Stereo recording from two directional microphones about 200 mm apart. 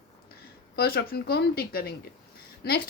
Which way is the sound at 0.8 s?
50° left (ahead or behind).